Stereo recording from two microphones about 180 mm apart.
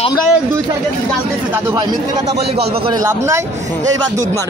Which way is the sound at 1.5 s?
20° right (ahead or behind).